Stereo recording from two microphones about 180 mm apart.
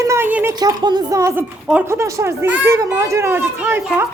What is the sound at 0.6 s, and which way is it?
A child's voice, 20° right (ahead or behind).